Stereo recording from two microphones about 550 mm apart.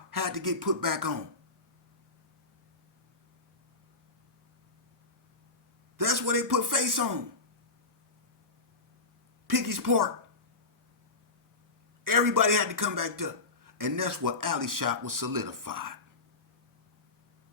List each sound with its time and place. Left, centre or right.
0.1 s speech: right
6.0 s speech: right
9.5 s speech: right
12.0 s speech: right